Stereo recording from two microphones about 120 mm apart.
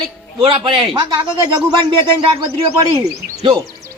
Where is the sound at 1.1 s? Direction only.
35° right (ahead or behind).